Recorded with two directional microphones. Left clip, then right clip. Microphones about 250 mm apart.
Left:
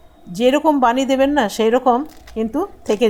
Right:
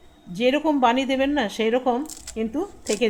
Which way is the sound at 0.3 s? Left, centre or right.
Centre.